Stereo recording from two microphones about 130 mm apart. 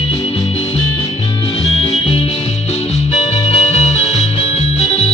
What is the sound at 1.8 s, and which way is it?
Music, 50° left (ahead or behind).